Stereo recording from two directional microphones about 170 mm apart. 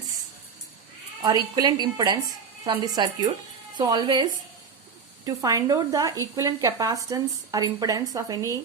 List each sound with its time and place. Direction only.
1.2 s speech: 25° right (ahead or behind)